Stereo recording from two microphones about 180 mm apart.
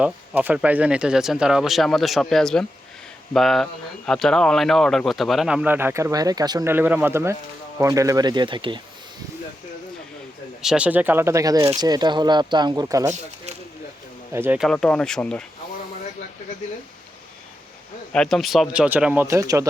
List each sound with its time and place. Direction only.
0.0 s speech: 10° right (ahead or behind); by 8.8 s 25° right (ahead or behind)
10.6 s speech: 5° right (ahead or behind)
14.3 s speech: 10° right (ahead or behind)
14.6 s speech: 5° left (ahead or behind)
18.1 s speech: 5° left (ahead or behind); by 19.6 s 15° right (ahead or behind)